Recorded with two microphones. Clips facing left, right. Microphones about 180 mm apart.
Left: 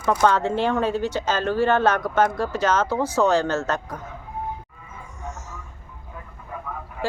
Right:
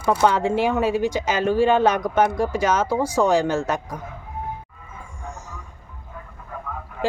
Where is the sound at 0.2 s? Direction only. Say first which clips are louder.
Right 1 dB; 10° right (ahead or behind).